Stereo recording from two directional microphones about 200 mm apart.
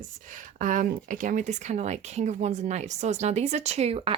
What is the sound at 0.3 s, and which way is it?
A woman's voice, 40° right (ahead or behind).